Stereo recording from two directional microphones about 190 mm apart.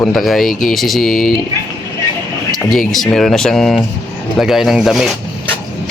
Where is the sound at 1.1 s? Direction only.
45° left (ahead or behind).